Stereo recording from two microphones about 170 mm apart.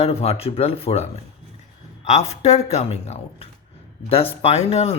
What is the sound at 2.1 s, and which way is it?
Speech, 40° left (ahead or behind).